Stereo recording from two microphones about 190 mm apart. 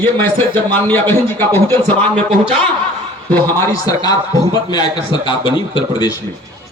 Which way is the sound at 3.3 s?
15° left (ahead or behind).